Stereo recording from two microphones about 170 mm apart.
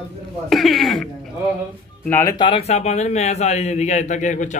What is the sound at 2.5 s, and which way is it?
A man's voice, 40° left (ahead or behind).